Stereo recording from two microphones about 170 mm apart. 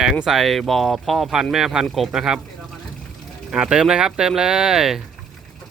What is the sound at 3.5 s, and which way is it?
Speech, 5° right (ahead or behind).